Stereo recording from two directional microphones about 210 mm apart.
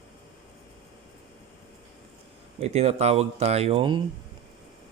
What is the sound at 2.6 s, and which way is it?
Speech, 30° right (ahead or behind).